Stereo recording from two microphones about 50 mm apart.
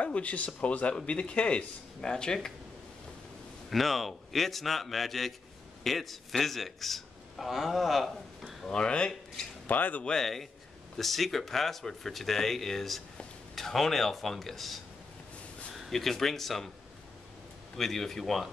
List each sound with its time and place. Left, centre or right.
0.0 s speech: left; by 2.5 s centre
3.7 s a man's voice: centre
8.6 s speech: centre
9.7 s speech: left
10.0 s speech: centre
15.9 s speech: centre
17.7 s speech: centre